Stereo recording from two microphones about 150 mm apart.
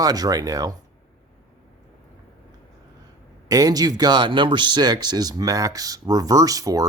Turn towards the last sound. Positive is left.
turn(degrees=-25)  # may be behind; listen again after turning